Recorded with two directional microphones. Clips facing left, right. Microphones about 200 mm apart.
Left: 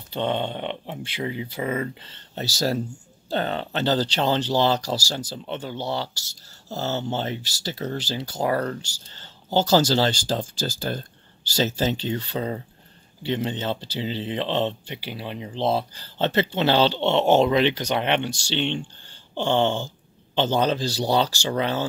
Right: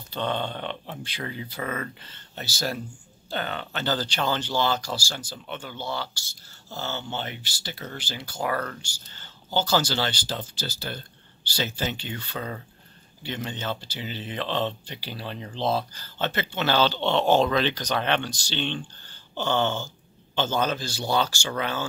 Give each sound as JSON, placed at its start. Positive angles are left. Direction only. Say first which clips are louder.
{"t": 0.1, "sound": "speech", "louder": "left 3 dB", "side_deg": 20}